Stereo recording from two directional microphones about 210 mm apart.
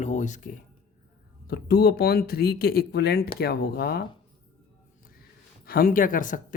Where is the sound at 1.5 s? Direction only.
50° left (ahead or behind).